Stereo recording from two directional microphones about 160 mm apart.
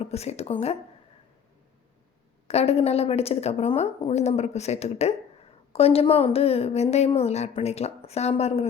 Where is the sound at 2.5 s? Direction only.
40° left (ahead or behind).